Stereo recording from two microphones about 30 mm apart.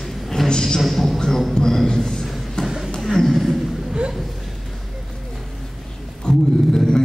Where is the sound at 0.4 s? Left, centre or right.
Centre.